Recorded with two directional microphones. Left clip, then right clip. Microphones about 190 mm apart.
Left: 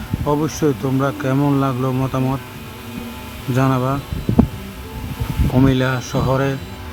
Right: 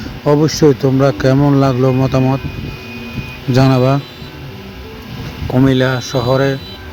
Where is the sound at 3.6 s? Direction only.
15° right (ahead or behind).